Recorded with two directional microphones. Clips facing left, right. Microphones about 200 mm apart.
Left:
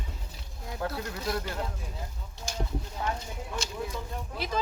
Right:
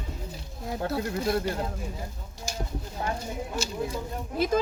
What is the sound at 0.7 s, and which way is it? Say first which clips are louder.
Speech: right 5 dB; 30° right (ahead or behind).